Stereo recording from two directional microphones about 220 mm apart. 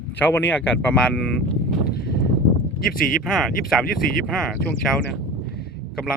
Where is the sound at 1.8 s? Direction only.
45° left (ahead or behind).